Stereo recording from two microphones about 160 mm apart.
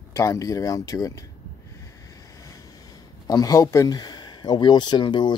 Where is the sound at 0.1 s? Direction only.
20° left (ahead or behind).